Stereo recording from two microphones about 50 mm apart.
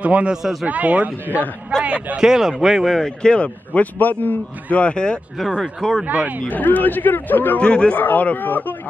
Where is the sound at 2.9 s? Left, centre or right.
Centre; by 4.4 s left.